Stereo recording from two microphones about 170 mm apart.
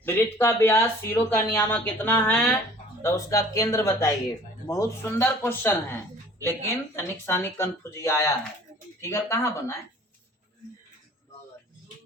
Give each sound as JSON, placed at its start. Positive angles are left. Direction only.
{"t": 0.0, "sound": "speech", "side_deg": 15}